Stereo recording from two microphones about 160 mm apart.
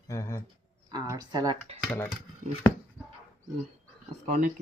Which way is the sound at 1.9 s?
5° left (ahead or behind).